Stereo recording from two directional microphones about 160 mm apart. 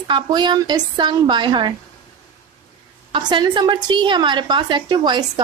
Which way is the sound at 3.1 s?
30° right (ahead or behind).